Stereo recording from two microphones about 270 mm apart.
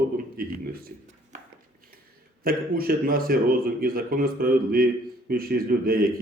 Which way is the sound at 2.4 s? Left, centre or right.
Right.